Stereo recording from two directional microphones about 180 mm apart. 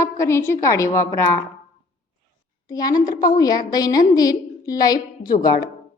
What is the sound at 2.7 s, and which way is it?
A woman's voice, 20° left (ahead or behind).